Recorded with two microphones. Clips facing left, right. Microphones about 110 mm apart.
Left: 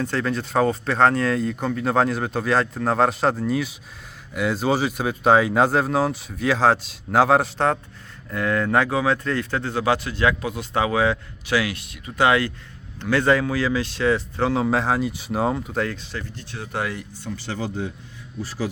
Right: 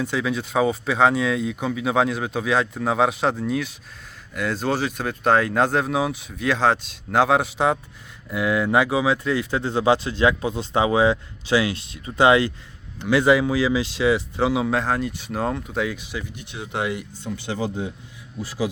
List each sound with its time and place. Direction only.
0.0 s speech: centre (ahead or behind)
14.7 s speech: 5° left (ahead or behind); by 18.7 s 15° right (ahead or behind)